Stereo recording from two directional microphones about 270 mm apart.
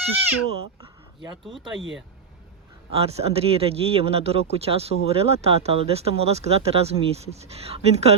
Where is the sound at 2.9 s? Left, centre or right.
Right.